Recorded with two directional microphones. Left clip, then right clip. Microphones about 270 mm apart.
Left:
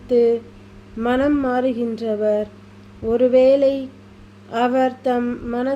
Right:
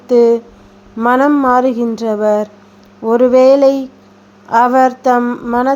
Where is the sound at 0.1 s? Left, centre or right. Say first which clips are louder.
Right 7 dB; centre.